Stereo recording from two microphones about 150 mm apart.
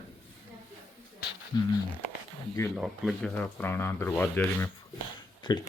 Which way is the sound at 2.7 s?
Centre (ahead or behind).